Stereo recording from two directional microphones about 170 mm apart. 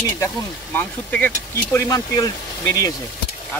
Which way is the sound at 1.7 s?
20° left (ahead or behind).